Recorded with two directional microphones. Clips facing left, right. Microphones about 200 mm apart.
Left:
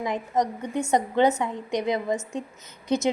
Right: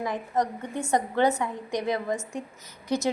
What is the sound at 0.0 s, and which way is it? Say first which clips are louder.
A woman's voice: left 2 dB; 20° left (ahead or behind).